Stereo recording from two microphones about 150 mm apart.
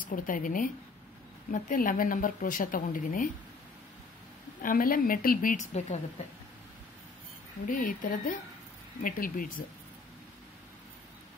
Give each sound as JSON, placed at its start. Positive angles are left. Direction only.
{"t": 0.1, "sound": "a woman's voice", "side_deg": 65}
{"t": 4.6, "sound": "a woman's voice", "side_deg": 65}
{"t": 5.7, "sound": "a woman's voice", "side_deg": 50}
{"t": 7.6, "sound": "speech", "side_deg": 65}